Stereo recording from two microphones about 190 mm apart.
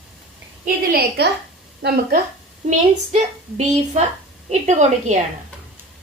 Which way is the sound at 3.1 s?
40° right (ahead or behind).